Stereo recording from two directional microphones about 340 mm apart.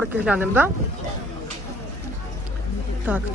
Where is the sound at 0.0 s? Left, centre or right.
Centre.